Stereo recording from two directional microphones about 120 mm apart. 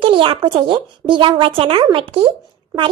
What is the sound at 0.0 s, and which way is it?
Speech, 45° right (ahead or behind).